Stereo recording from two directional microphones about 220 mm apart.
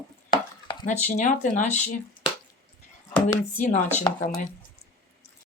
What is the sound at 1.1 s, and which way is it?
Speech, 35° left (ahead or behind).